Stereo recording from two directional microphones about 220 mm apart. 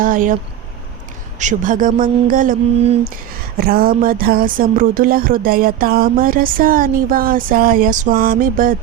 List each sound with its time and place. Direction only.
0.0 s speech: 40° right (ahead or behind)
1.4 s speech: 35° right (ahead or behind)
3.6 s speech: 40° right (ahead or behind)